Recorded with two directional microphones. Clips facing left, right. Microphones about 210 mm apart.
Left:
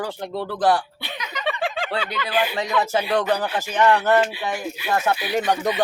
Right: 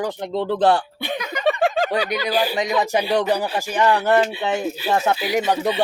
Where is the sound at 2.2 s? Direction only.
35° right (ahead or behind).